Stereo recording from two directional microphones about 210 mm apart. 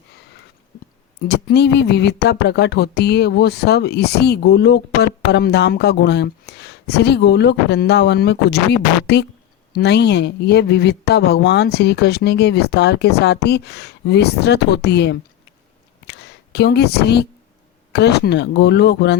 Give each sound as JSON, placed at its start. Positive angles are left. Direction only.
{"t": 1.3, "sound": "speech", "side_deg": 50}
{"t": 16.0, "sound": "a sound", "side_deg": 50}
{"t": 17.9, "sound": "speech", "side_deg": 50}